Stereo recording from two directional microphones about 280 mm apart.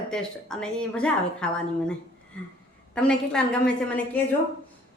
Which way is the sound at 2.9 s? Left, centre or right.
Centre.